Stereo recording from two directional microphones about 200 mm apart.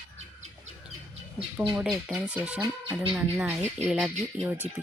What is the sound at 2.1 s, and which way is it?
Speech, 5° right (ahead or behind).